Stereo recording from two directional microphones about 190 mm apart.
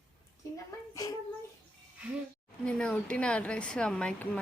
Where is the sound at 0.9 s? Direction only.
20° left (ahead or behind).